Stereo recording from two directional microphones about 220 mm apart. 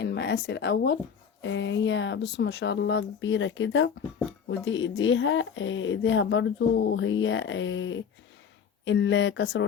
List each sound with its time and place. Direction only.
0.0 s speech: 50° left (ahead or behind)